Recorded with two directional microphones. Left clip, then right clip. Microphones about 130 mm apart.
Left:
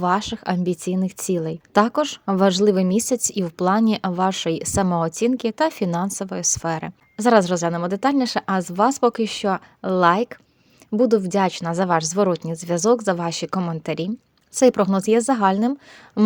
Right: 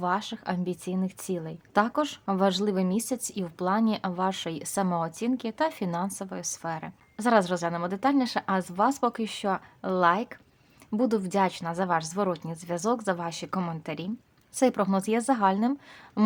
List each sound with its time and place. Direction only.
0.0 s a woman's voice: 45° left (ahead or behind)
10.9 s a woman's voice: 30° left (ahead or behind)
16.2 s speech: 25° left (ahead or behind)